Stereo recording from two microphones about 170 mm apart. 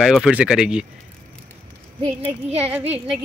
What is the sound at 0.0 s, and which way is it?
Speech, 5° right (ahead or behind).